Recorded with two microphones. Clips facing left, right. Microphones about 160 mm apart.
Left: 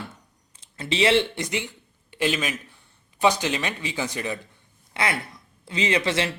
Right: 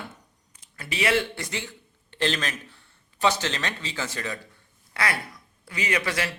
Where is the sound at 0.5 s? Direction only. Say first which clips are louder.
Left 7 dB; 25° left (ahead or behind).